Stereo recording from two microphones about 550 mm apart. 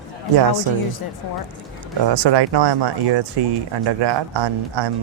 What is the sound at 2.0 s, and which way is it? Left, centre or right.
Speech, right.